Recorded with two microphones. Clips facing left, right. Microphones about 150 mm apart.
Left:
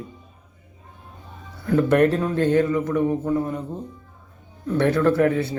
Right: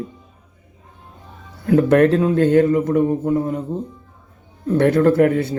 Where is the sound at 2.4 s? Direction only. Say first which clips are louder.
Right 3 dB; 45° right (ahead or behind).